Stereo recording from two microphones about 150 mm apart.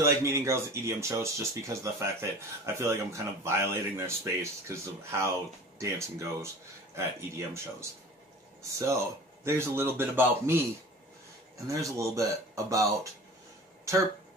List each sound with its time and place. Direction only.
0.0 s speech: 20° right (ahead or behind)
8.7 s a man's voice: 20° right (ahead or behind)
11.6 s speech: 20° right (ahead or behind)